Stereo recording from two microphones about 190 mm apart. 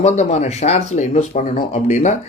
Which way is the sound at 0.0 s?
35° left (ahead or behind).